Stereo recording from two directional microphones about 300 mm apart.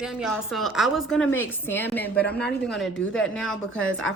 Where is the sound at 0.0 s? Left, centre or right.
Centre.